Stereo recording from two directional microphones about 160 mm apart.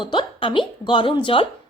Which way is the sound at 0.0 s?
30° left (ahead or behind).